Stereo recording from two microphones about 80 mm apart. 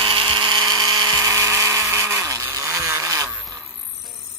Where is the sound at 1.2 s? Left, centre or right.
Right.